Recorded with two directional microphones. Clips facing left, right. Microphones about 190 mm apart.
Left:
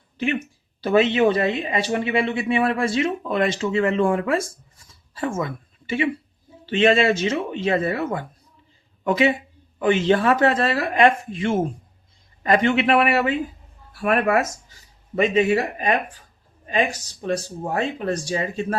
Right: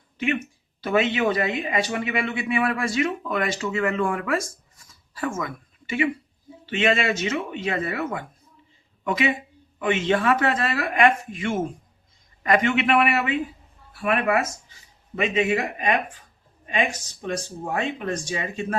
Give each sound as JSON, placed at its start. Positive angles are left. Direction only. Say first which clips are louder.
{"t": 0.8, "sound": "a man's voice", "louder": "left 5 dB", "side_deg": 30}